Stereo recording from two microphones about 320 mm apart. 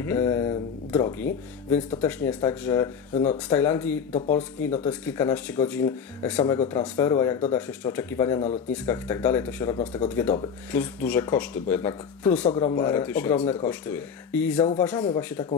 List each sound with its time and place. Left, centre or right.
0.0 s speech: centre
3.2 s speech: centre
3.5 s speech: centre